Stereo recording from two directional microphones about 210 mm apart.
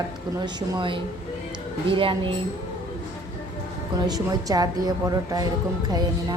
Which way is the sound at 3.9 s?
20° right (ahead or behind).